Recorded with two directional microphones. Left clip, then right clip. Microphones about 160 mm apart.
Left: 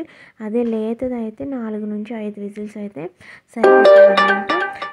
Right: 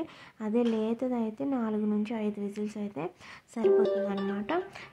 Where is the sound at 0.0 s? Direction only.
30° left (ahead or behind).